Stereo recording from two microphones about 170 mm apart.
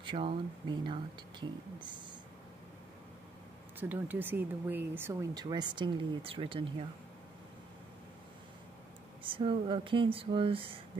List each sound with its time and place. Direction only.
0.0 s speech: 30° right (ahead or behind)
3.9 s speech: 10° right (ahead or behind)
5.3 s speech: 25° right (ahead or behind)
9.2 s speech: 30° right (ahead or behind)